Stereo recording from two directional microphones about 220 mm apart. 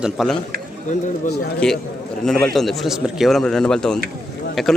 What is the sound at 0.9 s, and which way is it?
Speech, 35° left (ahead or behind).